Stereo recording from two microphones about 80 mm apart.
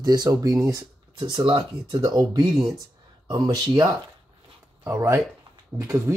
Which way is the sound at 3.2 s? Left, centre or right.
Right.